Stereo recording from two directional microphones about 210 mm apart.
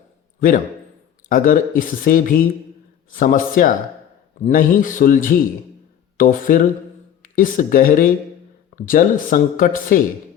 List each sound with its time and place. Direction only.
0.3 s a man's voice: 40° left (ahead or behind)